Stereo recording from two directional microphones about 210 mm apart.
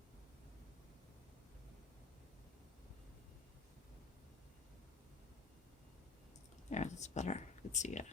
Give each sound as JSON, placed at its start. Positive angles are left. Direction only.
{"t": 6.7, "sound": "speech", "side_deg": 35}